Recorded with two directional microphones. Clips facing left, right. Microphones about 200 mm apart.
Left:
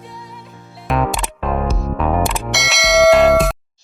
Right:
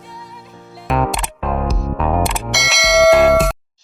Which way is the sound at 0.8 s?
Centre (ahead or behind).